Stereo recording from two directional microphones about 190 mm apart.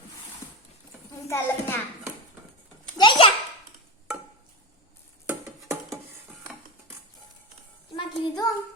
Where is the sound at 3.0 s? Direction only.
25° left (ahead or behind).